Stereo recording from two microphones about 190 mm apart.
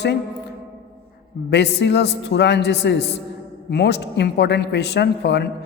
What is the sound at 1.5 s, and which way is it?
A man's voice, 65° left (ahead or behind).